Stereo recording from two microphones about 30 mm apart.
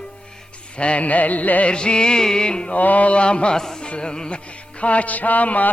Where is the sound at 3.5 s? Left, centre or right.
Left.